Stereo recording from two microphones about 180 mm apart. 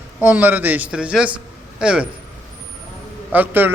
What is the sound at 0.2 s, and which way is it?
A man's voice, 10° right (ahead or behind).